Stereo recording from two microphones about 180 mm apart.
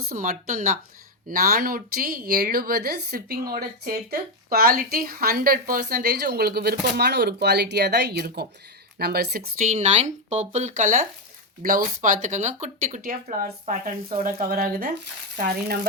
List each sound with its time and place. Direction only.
0.1 s a woman's voice: 50° right (ahead or behind)